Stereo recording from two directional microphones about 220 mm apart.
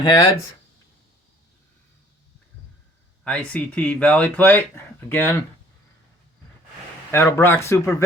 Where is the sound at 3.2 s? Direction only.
5° left (ahead or behind).